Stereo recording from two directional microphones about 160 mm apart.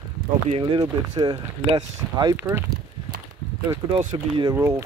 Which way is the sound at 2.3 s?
15° right (ahead or behind).